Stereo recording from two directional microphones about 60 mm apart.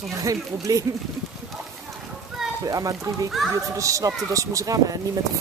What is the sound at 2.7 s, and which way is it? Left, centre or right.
Speech, right.